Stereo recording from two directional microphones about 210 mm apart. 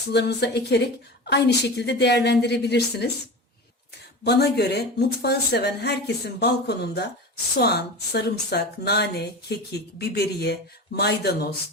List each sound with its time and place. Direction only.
0.1 s speech: 50° left (ahead or behind)
4.2 s speech: 50° left (ahead or behind)